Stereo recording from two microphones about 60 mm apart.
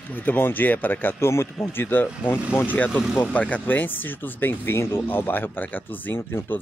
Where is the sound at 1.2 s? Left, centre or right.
Left.